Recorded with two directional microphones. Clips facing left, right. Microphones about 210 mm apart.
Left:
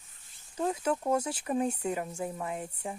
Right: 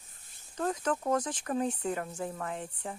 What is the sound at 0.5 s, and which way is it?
Speech, 10° left (ahead or behind).